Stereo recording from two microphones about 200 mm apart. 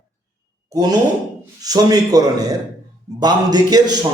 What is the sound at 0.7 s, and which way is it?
A man's voice, 20° right (ahead or behind).